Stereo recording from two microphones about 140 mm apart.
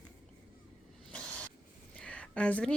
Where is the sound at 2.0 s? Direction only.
5° left (ahead or behind).